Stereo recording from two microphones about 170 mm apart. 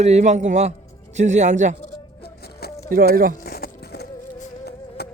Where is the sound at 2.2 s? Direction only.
70° left (ahead or behind).